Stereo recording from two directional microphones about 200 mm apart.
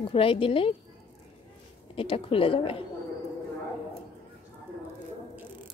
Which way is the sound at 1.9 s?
25° left (ahead or behind).